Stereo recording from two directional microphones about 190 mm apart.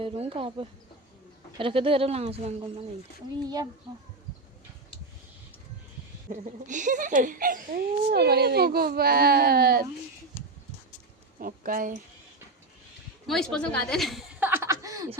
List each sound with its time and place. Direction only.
0.0 s speech: 30° right (ahead or behind)
6.4 s speech: 40° right (ahead or behind)
11.3 s speech: 50° right (ahead or behind)
13.2 s speech: centre (ahead or behind); by 15.2 s 20° right (ahead or behind)